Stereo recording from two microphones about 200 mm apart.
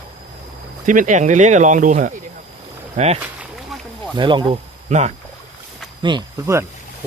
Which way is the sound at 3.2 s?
5° right (ahead or behind).